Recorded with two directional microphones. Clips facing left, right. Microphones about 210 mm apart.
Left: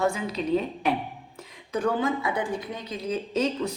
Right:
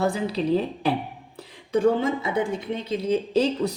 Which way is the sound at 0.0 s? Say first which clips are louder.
Right 3 dB; 35° right (ahead or behind).